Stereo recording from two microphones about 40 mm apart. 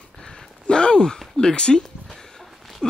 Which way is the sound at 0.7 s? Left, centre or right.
Left.